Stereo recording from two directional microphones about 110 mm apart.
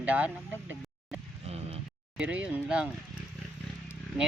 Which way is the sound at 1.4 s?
70° right (ahead or behind).